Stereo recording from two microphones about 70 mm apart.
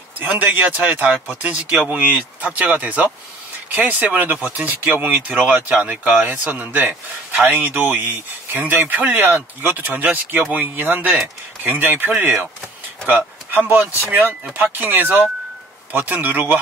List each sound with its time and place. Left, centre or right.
0.2 s speech: right
13.5 s speech: right